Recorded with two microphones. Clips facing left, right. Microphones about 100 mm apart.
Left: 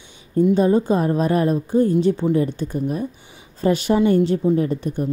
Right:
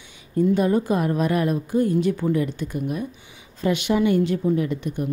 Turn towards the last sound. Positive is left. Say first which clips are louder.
# left 3 dB
turn(degrees=35)  # may be behind; listen again after turning